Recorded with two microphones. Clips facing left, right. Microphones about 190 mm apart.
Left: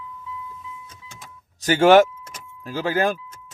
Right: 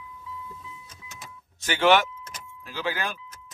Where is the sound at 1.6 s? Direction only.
40° left (ahead or behind).